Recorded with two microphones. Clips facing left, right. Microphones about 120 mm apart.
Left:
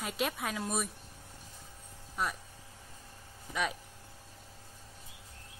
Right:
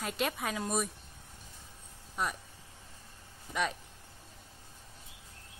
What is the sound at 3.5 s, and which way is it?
Speech, centre (ahead or behind).